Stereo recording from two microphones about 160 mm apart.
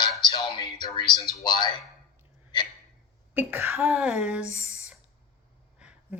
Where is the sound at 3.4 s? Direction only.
15° right (ahead or behind).